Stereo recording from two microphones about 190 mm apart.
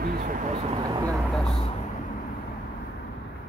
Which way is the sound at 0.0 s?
50° right (ahead or behind).